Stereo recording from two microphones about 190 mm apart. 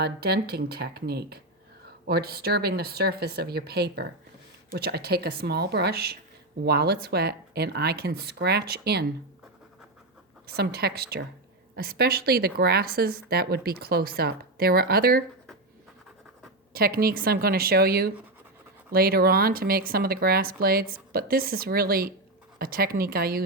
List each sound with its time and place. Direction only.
0.0 s speech: 55° right (ahead or behind)
10.4 s speech: 55° right (ahead or behind)
16.7 s speech: 50° right (ahead or behind)